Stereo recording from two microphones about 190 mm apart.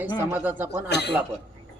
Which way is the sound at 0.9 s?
60° left (ahead or behind).